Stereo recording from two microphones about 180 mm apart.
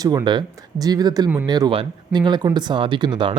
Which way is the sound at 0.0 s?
20° right (ahead or behind).